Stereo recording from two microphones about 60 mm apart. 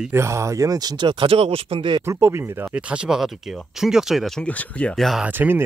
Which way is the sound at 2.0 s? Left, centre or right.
Right.